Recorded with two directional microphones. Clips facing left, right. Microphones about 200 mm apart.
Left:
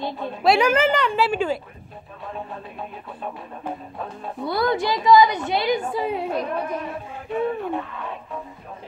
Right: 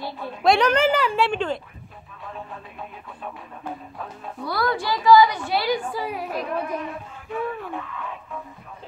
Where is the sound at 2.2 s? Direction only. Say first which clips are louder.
Left 3 dB; 35° left (ahead or behind).